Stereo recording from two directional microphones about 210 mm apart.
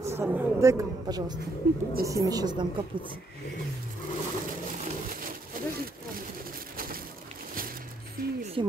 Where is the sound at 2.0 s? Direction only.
15° right (ahead or behind).